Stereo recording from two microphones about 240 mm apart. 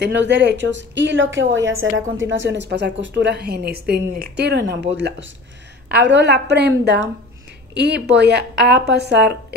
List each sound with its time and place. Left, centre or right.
0.0 s a woman's voice: right